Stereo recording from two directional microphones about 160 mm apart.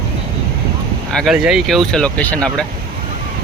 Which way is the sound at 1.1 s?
Centre (ahead or behind).